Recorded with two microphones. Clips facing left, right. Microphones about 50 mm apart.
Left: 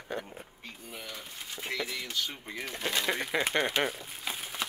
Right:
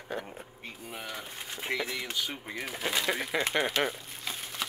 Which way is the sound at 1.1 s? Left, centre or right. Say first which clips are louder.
Right 3 dB; centre.